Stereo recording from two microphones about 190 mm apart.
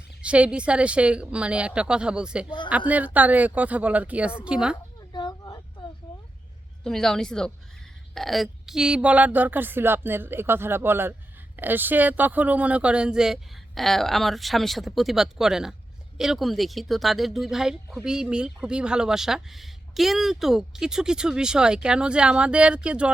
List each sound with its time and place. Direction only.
0.2 s a woman's voice: 5° right (ahead or behind)
5.1 s a sound: 20° left (ahead or behind)
6.8 s a woman's voice: centre (ahead or behind)